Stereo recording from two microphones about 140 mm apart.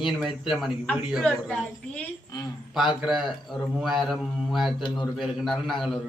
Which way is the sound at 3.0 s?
Centre (ahead or behind).